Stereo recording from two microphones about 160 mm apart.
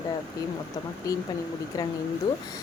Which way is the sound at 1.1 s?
20° left (ahead or behind).